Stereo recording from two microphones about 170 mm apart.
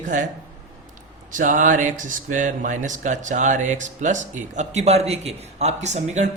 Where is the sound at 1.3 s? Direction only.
50° right (ahead or behind).